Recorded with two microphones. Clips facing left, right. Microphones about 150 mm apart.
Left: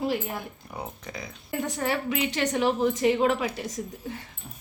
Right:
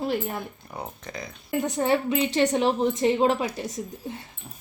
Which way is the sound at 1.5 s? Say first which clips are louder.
Right 5 dB; 20° right (ahead or behind).